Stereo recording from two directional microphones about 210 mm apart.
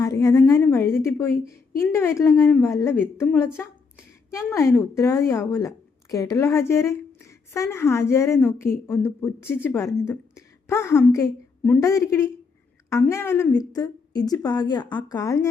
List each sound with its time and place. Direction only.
0.0 s a woman's voice: 15° left (ahead or behind)